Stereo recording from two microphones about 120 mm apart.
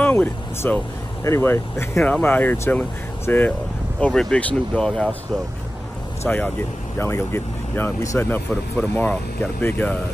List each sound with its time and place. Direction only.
0.0 s speech: 15° left (ahead or behind)
6.2 s speech: 15° left (ahead or behind)